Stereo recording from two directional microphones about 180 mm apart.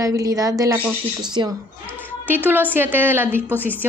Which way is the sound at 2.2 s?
10° right (ahead or behind).